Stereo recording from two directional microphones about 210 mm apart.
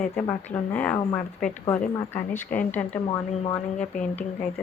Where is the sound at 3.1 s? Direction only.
30° left (ahead or behind).